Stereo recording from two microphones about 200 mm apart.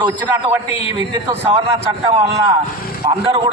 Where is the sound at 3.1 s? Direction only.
30° right (ahead or behind).